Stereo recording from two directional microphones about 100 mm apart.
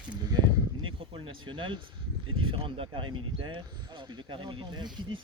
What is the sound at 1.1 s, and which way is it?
Speech, 55° right (ahead or behind).